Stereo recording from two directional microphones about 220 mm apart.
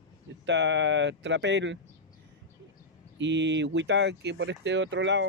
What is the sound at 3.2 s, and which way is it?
Speech, 55° right (ahead or behind).